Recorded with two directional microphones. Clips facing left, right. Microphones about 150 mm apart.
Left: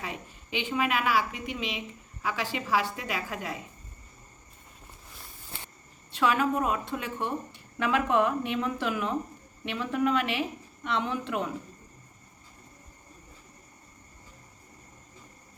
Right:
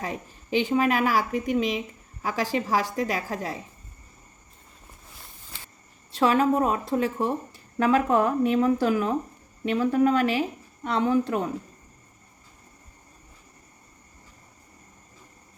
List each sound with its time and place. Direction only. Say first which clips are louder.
0.0 s a woman's voice: right 5 dB; 40° right (ahead or behind)
6.1 s a woman's voice: right 5 dB; 35° right (ahead or behind)